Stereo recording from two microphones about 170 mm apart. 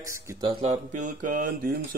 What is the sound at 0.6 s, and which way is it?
Mantra, 45° right (ahead or behind).